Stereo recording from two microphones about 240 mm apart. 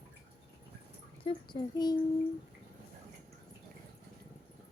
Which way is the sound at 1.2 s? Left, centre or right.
Centre.